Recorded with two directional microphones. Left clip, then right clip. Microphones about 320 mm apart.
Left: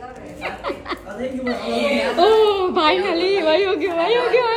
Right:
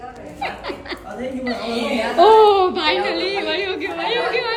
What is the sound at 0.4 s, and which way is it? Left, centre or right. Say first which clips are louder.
Chuckle: left 1 dB; centre.